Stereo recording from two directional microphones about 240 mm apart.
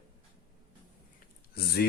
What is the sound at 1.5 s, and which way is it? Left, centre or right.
Speech, left.